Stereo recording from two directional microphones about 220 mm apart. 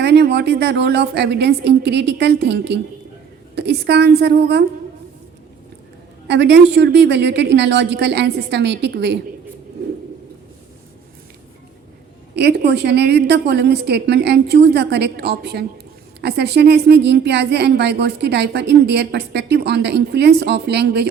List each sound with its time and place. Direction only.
0.0 s a woman's voice: 50° right (ahead or behind)
6.2 s a woman's voice: 50° right (ahead or behind)
12.4 s a woman's voice: 50° right (ahead or behind)